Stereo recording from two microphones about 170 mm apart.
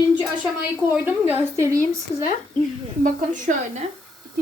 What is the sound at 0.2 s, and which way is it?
A woman's voice, 10° right (ahead or behind).